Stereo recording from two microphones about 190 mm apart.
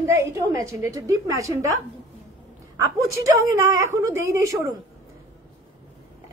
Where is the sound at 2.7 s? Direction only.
15° right (ahead or behind).